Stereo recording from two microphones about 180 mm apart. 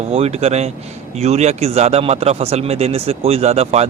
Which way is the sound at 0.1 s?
35° right (ahead or behind).